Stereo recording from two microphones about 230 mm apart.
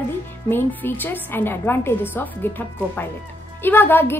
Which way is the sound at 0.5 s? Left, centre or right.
Centre.